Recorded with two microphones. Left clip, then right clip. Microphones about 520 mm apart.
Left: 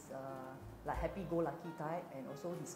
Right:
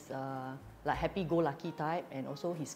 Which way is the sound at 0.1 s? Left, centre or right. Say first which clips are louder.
Right 6 dB; right.